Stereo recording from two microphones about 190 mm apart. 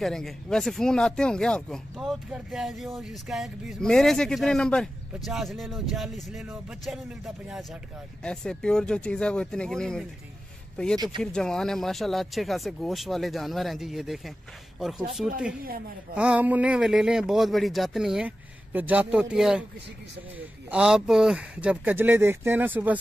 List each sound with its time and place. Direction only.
0.0 s speech: 5° left (ahead or behind)
11.0 s speech: 25° right (ahead or behind)
11.3 s speech: 5° left (ahead or behind)
16.2 s speech: 5° right (ahead or behind)